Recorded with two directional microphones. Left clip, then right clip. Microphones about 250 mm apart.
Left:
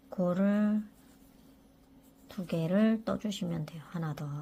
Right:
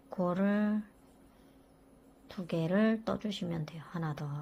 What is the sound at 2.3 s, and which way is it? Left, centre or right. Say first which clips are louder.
A woman's voice: even; centre.